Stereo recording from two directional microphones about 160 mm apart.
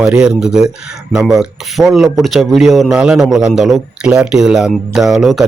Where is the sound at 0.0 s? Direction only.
5° right (ahead or behind).